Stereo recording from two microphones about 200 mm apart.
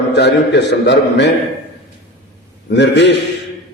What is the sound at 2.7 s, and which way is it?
Speech, 60° left (ahead or behind).